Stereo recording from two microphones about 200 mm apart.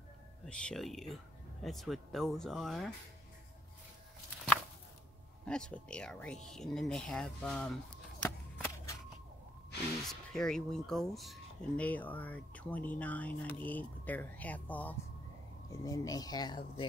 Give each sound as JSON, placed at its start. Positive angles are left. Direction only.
{"t": 0.5, "sound": "speech", "side_deg": 5}
{"t": 5.4, "sound": "speech", "side_deg": 5}
{"t": 10.0, "sound": "speech", "side_deg": 0}